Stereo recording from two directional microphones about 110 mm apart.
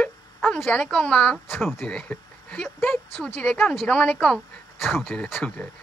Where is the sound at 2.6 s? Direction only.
20° left (ahead or behind).